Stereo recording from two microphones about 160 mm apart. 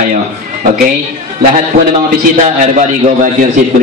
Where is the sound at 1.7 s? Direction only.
70° right (ahead or behind).